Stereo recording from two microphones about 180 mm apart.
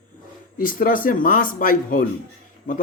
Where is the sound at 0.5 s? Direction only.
50° left (ahead or behind).